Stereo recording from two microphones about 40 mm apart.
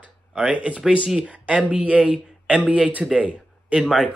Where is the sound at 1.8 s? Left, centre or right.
Right.